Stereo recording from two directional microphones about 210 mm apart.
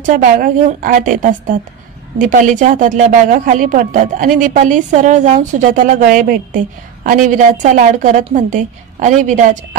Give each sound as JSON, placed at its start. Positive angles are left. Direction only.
{"t": 0.0, "sound": "a woman's voice", "side_deg": -40}